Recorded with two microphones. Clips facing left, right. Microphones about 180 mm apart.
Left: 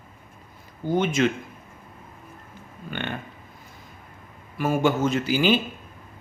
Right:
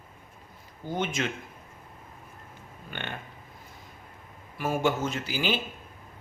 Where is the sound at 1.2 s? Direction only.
90° left.